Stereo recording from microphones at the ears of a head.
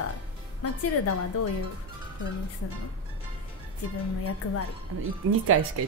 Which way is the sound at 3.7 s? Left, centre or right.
Left.